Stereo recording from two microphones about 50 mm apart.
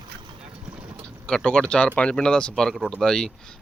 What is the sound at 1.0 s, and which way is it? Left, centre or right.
Speech, centre.